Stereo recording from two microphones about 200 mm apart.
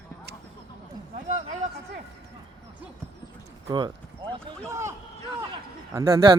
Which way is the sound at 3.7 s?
20° right (ahead or behind).